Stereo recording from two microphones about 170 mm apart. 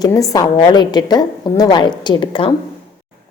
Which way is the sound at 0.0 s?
20° left (ahead or behind).